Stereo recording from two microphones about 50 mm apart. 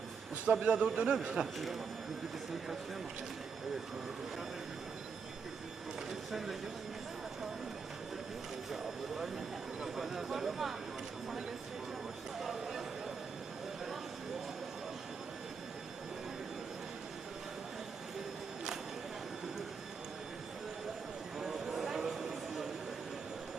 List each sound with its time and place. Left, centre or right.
0.6 s a man's voice: right
6.1 s speech: centre
8.7 s speech: centre
12.4 s a sound: centre
21.3 s vehicle: centre